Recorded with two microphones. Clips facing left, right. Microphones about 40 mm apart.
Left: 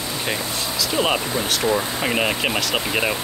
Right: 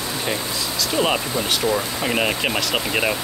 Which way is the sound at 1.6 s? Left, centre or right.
Left.